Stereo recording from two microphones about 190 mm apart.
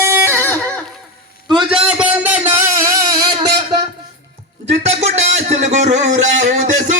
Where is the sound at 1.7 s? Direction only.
5° right (ahead or behind).